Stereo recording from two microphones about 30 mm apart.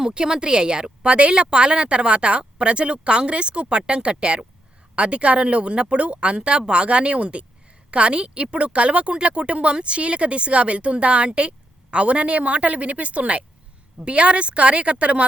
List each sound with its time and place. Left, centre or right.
0.0 s speech: right